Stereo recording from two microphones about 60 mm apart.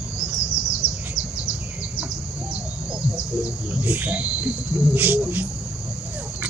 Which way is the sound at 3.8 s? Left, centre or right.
Right.